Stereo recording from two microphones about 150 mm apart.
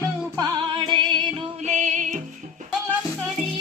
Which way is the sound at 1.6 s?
55° right (ahead or behind).